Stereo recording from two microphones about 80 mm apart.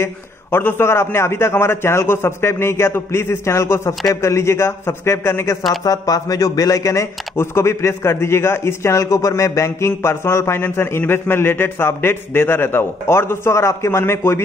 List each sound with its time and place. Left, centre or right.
0.0 s speech: left
5.9 s speech: left